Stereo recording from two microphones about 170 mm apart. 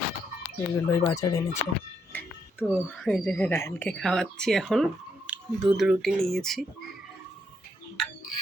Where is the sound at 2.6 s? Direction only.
Centre (ahead or behind).